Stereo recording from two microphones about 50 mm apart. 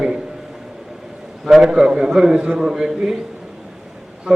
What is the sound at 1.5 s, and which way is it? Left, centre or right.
A man's voice, centre.